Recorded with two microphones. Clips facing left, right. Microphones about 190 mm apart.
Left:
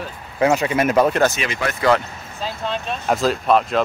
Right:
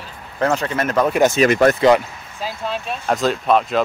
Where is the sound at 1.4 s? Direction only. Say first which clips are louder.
Right 11 dB; 45° right (ahead or behind).